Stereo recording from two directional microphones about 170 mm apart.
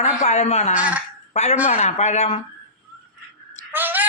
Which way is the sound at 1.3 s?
40° left (ahead or behind).